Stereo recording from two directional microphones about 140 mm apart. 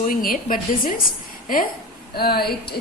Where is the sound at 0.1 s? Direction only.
90° left.